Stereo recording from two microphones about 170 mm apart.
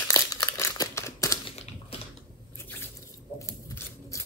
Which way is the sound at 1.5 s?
35° left (ahead or behind).